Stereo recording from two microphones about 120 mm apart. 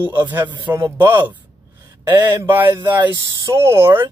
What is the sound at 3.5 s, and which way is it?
Speech, 20° right (ahead or behind).